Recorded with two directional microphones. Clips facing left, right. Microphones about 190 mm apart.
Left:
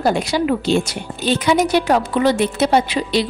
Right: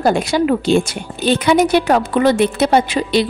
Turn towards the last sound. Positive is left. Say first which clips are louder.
# right 3 dB
turn(degrees=-55)  # may be behind; listen again after turning